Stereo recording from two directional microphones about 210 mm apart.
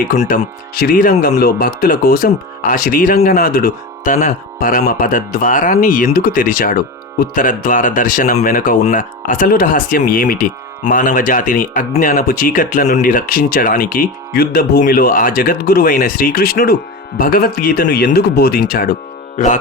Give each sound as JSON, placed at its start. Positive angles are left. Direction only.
{"t": 0.1, "sound": "speech", "side_deg": 50}